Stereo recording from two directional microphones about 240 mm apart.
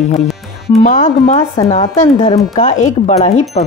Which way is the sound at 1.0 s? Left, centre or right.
Left.